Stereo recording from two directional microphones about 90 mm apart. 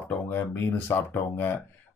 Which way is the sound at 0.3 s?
25° left (ahead or behind).